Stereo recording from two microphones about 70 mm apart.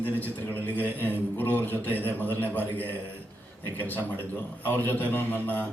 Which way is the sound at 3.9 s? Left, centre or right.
Left.